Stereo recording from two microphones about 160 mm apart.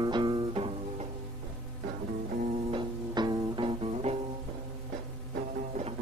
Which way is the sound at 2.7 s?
30° right (ahead or behind).